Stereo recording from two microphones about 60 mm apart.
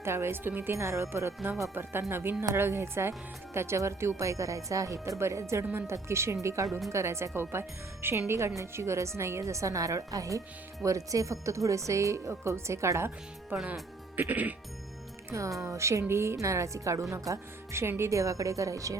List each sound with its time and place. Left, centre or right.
0.0 s speech: right
6.7 s speech: centre
6.9 s speech: right
13.5 s speech: right
14.2 s music: right
15.4 s speech: right